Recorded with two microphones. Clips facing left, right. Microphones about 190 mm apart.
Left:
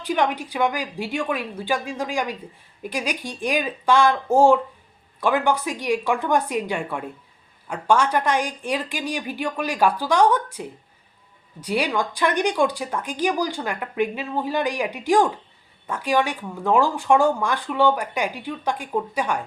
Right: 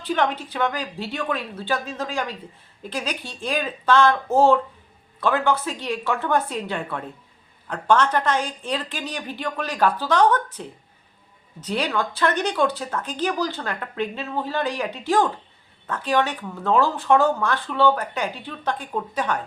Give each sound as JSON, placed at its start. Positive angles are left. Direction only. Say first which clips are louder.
{"t": 0.0, "sound": "speech", "louder": "left 1 dB", "side_deg": 10}